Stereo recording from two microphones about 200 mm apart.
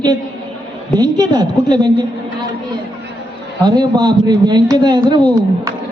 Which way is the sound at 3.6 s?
20° right (ahead or behind).